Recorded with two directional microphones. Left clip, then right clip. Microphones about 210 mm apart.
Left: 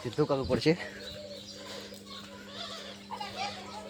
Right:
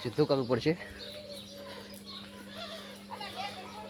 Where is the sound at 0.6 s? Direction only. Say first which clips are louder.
Left 4 dB; 15° left (ahead or behind).